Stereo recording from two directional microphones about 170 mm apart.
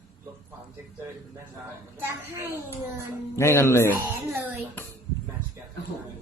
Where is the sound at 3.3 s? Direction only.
15° left (ahead or behind).